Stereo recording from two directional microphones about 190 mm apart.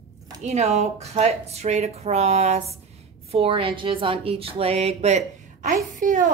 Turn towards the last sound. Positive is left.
turn(degrees=-45)  # may be behind; listen again after turning